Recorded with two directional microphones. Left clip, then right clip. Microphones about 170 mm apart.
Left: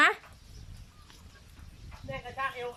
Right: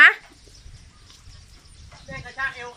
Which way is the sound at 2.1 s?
10° left (ahead or behind).